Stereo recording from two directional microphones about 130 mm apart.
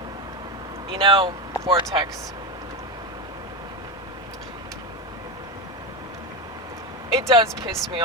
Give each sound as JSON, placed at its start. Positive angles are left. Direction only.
{"t": 0.9, "sound": "speech", "side_deg": -45}
{"t": 7.1, "sound": "speech", "side_deg": -25}